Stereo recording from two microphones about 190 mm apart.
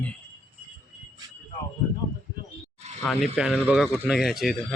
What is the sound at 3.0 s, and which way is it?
Speech, centre (ahead or behind).